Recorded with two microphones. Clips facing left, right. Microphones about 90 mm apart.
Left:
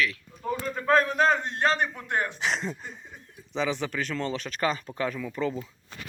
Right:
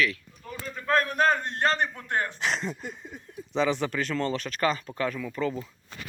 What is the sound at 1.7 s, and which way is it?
Speech, 10° left (ahead or behind).